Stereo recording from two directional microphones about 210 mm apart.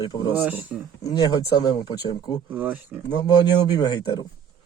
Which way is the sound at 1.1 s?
20° left (ahead or behind).